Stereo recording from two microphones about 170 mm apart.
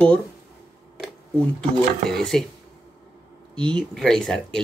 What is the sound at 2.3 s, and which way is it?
Speech, centre (ahead or behind).